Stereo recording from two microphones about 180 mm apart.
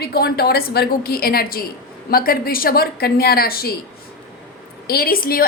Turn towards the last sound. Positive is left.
turn(degrees=55)  # may be behind; listen again after turning